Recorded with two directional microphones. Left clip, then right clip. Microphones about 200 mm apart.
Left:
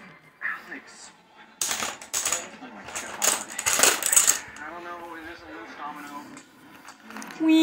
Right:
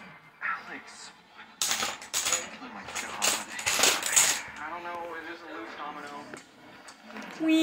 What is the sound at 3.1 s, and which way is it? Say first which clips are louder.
Coin: left 3 dB; 35° left (ahead or behind).